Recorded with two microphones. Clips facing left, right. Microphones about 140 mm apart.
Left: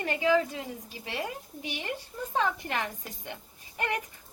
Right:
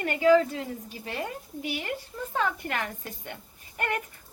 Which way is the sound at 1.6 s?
20° left (ahead or behind).